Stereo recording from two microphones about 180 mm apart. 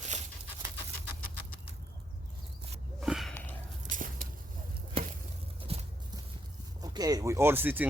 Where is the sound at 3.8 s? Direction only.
45° right (ahead or behind).